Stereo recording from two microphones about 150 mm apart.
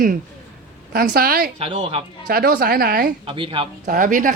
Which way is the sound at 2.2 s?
90° right.